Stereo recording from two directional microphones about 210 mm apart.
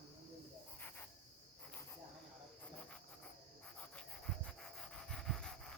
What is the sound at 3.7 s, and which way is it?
Pant, 5° left (ahead or behind).